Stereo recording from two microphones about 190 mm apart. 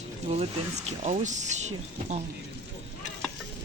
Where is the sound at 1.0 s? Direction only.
40° right (ahead or behind).